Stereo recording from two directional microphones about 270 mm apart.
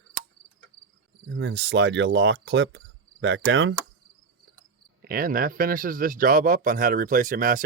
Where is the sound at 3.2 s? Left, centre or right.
Right.